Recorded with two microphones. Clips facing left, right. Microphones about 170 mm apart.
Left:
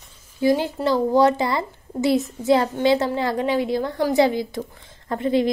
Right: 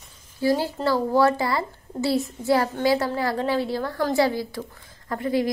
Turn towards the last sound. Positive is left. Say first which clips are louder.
# left 3 dB
turn(degrees=25)  # may be behind; listen again after turning